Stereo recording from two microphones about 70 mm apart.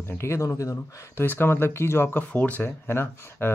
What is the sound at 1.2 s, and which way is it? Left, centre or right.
Speech, left.